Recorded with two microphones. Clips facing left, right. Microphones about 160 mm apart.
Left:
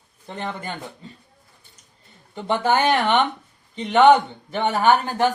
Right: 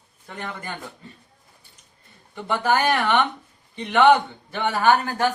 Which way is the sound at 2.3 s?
20° left (ahead or behind).